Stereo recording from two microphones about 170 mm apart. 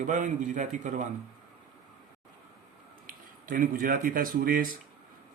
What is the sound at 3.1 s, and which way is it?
Speech, 55° right (ahead or behind).